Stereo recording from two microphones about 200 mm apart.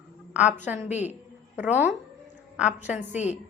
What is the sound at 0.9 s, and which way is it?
Speech, 35° left (ahead or behind).